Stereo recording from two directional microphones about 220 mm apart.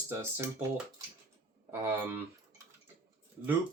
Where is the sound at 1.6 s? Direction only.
10° right (ahead or behind).